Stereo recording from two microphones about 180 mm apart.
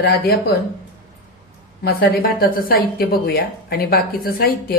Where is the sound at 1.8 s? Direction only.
55° left (ahead or behind).